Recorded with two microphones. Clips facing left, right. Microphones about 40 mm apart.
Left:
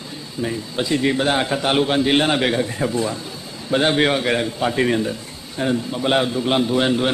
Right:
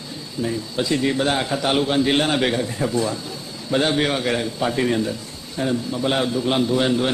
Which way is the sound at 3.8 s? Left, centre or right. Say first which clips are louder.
Left 5 dB; left.